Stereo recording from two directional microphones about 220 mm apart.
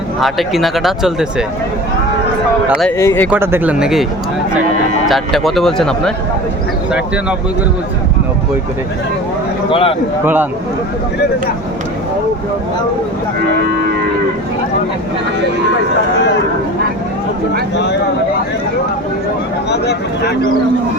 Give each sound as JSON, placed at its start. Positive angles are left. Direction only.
{"t": 0.2, "sound": "speech", "side_deg": 0}
{"t": 2.6, "sound": "speech", "side_deg": 0}
{"t": 3.0, "sound": "speech", "side_deg": 10}
{"t": 3.2, "sound": "speech", "side_deg": -10}
{"t": 5.0, "sound": "speech", "side_deg": 0}
{"t": 9.6, "sound": "a man's voice", "side_deg": 25}
{"t": 19.7, "sound": "speech", "side_deg": 50}